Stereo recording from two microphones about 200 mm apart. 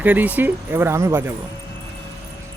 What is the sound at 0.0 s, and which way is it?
Speech, 10° right (ahead or behind).